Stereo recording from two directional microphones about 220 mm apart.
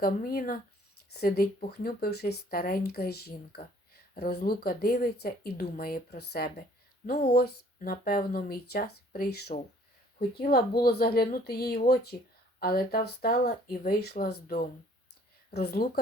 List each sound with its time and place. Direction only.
0.0 s speech: 40° left (ahead or behind)